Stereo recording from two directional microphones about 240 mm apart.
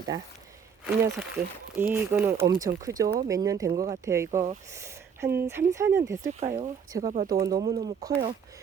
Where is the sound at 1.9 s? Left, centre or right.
Centre.